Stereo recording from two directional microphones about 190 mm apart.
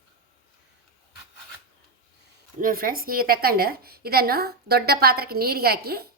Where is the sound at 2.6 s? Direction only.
50° right (ahead or behind).